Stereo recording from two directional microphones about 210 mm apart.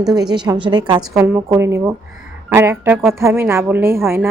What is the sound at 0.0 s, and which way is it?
A woman's voice, 15° right (ahead or behind).